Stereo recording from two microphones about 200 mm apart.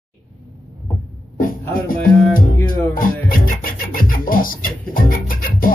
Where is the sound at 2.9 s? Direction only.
45° left (ahead or behind).